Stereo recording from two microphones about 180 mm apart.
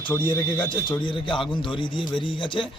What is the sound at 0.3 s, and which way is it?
A man's voice, 25° left (ahead or behind).